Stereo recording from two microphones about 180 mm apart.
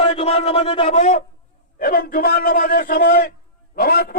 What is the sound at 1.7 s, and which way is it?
A man's voice, 55° left (ahead or behind).